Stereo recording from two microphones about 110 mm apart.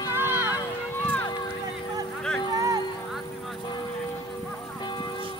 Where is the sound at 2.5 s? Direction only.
35° right (ahead or behind).